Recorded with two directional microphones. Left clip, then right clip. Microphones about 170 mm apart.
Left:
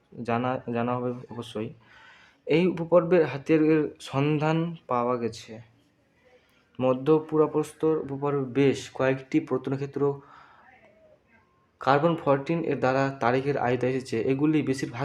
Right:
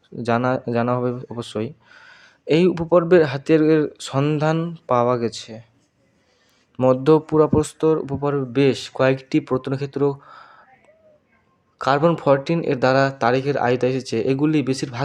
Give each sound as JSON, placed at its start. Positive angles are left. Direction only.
{"t": 0.2, "sound": "speech", "side_deg": -30}
{"t": 4.9, "sound": "speech", "side_deg": -30}
{"t": 6.8, "sound": "speech", "side_deg": -35}
{"t": 8.2, "sound": "speech", "side_deg": -25}
{"t": 11.8, "sound": "speech", "side_deg": -35}